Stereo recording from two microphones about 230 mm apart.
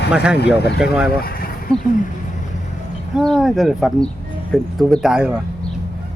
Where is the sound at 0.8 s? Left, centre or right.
Centre.